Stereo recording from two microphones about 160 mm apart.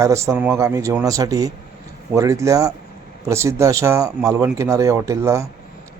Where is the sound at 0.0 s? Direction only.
20° right (ahead or behind).